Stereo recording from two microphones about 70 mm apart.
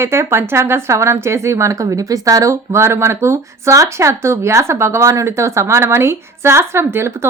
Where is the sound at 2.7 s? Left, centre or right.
Right.